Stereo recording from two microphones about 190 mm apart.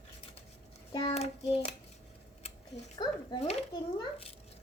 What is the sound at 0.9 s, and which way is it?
Hands, 30° left (ahead or behind).